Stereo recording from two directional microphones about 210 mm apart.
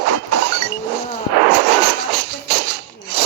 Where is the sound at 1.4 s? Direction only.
55° right (ahead or behind).